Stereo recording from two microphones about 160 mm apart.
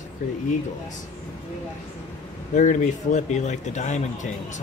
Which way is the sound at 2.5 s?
50° left (ahead or behind).